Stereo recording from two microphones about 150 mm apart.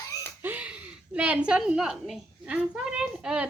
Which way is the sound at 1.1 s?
10° right (ahead or behind).